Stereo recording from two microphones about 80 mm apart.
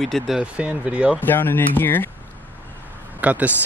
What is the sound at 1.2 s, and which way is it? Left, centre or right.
Speech, left.